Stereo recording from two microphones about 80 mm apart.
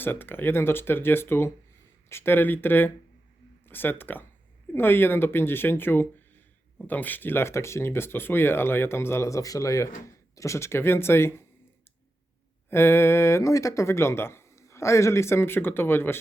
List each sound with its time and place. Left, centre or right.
0.0 s speech: left
12.7 s speech: left